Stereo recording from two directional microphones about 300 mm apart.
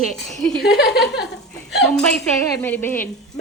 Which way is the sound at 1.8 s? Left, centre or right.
Centre.